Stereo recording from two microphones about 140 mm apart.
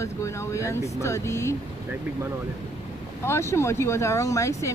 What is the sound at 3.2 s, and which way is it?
Speech, 20° left (ahead or behind).